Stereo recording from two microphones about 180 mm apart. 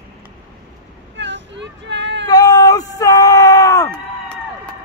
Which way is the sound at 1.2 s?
90° right.